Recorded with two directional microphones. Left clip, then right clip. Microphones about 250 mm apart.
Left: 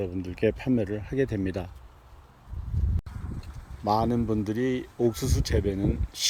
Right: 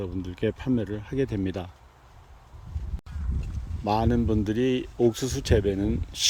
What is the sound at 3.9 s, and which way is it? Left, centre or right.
Speech, centre.